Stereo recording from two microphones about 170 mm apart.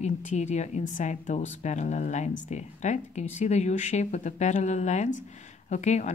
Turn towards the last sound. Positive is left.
turn(degrees=45)  # may be behind; listen again after turning